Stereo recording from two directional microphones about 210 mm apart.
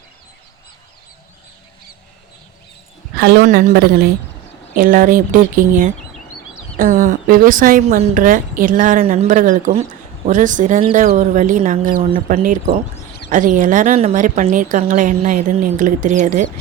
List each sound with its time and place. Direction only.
3.2 s a woman's voice: 50° right (ahead or behind)
3.4 s a woman's voice: 35° right (ahead or behind)